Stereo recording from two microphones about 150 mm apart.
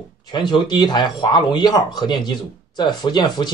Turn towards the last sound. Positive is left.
turn(degrees=30)  # may be behind; listen again after turning